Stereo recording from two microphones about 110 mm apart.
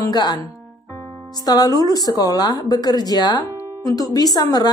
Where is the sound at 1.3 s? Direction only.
35° left (ahead or behind).